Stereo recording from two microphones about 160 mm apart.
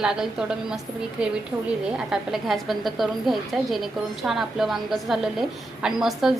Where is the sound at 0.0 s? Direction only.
5° right (ahead or behind).